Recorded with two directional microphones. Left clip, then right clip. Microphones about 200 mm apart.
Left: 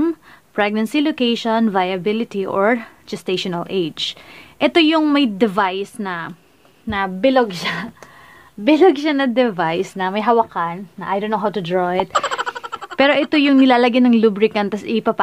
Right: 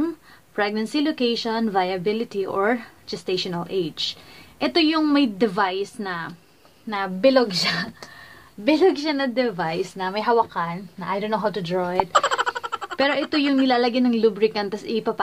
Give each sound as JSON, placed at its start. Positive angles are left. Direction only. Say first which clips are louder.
{"t": 0.6, "sound": "a woman's voice", "louder": "left 5 dB", "side_deg": 40}
{"t": 12.0, "sound": "a sound", "louder": "even", "side_deg": 0}
{"t": 12.9, "sound": "a woman's voice", "louder": "left 7 dB", "side_deg": 50}